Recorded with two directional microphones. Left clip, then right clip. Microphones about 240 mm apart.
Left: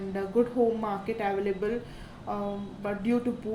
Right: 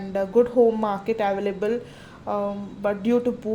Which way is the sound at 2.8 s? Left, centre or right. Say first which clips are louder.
Right 8 dB; right.